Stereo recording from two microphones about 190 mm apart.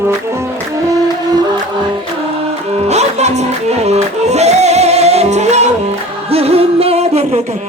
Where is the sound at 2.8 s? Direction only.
35° right (ahead or behind).